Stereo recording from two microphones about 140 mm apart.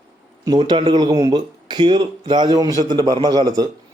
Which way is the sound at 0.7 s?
35° right (ahead or behind).